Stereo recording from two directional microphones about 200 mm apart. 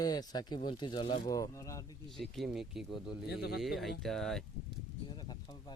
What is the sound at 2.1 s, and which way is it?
Speech, centre (ahead or behind).